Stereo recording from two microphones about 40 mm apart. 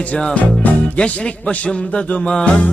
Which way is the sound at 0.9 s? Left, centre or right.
Left.